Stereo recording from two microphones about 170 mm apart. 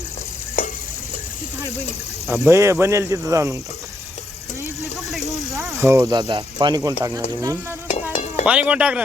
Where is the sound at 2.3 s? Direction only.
15° right (ahead or behind).